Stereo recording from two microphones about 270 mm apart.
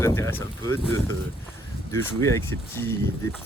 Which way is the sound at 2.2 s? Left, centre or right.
Centre.